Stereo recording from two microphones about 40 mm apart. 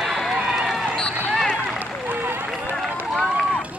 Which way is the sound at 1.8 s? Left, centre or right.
Right.